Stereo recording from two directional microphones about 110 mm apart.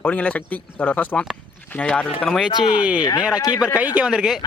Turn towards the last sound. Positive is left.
turn(degrees=-5)  # may be behind; listen again after turning